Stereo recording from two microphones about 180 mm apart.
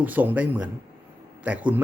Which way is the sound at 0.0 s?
10° right (ahead or behind).